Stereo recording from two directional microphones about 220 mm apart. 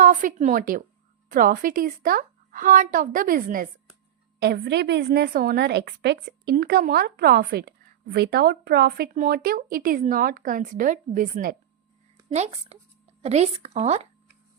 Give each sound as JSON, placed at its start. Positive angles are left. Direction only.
{"t": 0.0, "sound": "a woman's voice", "side_deg": -35}